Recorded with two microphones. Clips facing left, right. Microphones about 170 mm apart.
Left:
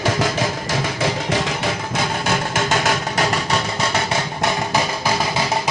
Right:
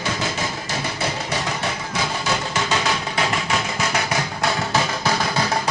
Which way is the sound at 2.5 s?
50° left (ahead or behind).